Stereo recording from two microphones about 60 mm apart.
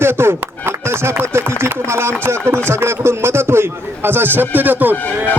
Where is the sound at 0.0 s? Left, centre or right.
Right.